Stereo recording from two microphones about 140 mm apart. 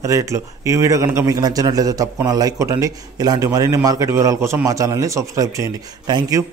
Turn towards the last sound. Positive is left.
turn(degrees=-30)  # may be behind; listen again after turning